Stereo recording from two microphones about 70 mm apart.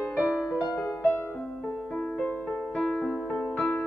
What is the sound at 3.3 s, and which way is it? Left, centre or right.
Music, left.